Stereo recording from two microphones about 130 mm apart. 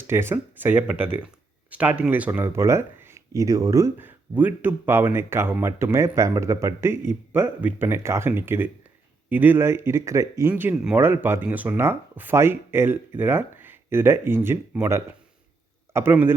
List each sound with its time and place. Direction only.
0.1 s a man's voice: 20° right (ahead or behind)